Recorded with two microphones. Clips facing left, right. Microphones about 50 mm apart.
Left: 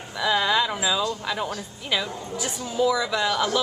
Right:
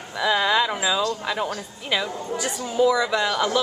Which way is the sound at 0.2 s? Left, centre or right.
Centre.